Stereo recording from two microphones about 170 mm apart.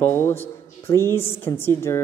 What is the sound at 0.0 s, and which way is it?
Speech, 15° left (ahead or behind).